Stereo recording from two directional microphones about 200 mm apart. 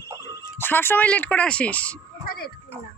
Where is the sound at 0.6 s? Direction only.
10° left (ahead or behind).